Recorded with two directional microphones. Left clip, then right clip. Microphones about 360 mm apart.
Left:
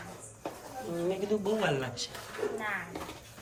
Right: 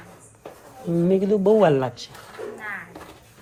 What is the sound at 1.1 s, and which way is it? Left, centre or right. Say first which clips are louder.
Speech: right 16 dB; centre.